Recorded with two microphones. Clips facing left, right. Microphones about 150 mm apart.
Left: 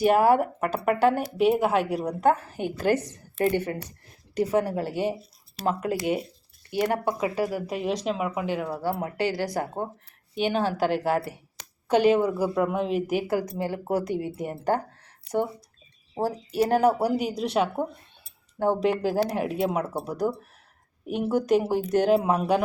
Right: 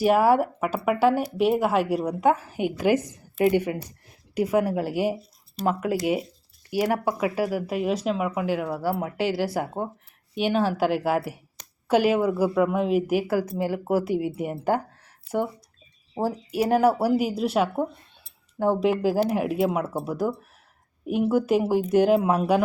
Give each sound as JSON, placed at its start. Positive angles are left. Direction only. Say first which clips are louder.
{"t": 0.0, "sound": "speech", "louder": "even", "side_deg": -5}
{"t": 15.3, "sound": "speech", "louder": "even", "side_deg": 75}
{"t": 16.1, "sound": "speech", "louder": "even", "side_deg": -10}